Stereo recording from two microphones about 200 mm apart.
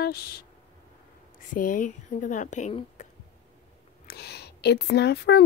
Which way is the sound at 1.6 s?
40° left (ahead or behind).